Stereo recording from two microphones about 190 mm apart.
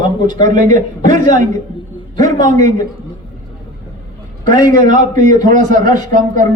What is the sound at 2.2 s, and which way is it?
Speech, 45° right (ahead or behind).